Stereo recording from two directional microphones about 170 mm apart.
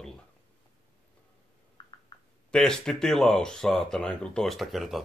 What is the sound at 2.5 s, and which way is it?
Speech, 5° left (ahead or behind).